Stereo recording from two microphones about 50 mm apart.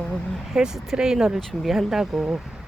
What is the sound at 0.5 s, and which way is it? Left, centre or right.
Speech, centre.